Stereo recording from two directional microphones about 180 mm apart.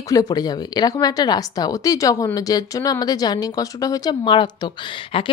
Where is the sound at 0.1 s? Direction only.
20° left (ahead or behind).